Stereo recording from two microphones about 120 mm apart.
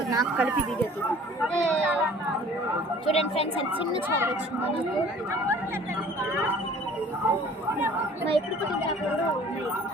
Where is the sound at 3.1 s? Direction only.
55° left (ahead or behind).